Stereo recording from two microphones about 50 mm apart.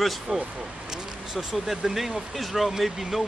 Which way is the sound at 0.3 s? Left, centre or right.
Centre.